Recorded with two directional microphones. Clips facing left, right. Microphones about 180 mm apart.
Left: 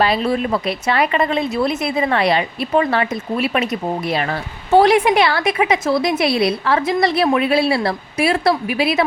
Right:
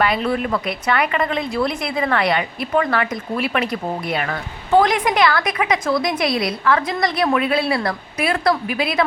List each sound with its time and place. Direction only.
0.0 s speech: 30° left (ahead or behind)